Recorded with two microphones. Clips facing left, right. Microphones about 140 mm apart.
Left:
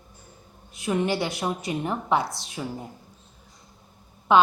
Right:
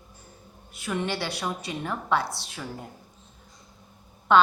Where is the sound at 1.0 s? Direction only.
20° left (ahead or behind).